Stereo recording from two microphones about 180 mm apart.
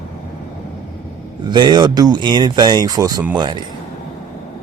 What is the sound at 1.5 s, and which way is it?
Speech, 25° right (ahead or behind).